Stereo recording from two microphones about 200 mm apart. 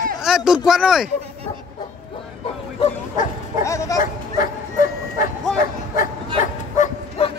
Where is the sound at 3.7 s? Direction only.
15° left (ahead or behind).